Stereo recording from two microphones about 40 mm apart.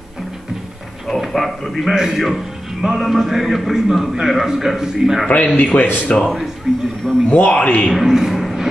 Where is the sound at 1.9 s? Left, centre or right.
Centre.